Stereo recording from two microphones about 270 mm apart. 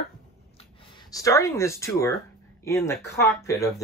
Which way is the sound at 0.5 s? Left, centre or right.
Centre.